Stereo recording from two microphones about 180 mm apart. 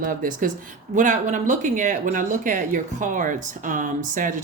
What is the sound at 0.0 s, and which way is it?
Speech, 50° right (ahead or behind).